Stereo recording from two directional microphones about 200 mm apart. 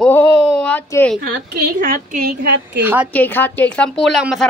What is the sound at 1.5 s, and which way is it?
Speech, 50° right (ahead or behind).